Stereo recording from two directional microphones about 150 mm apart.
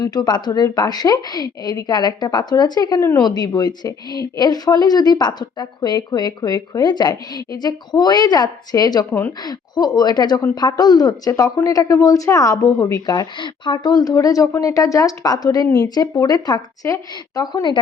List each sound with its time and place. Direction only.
0.0 s a woman's voice: 25° left (ahead or behind)